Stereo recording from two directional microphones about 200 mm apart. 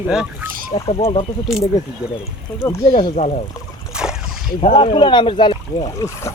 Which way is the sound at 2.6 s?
15° left (ahead or behind).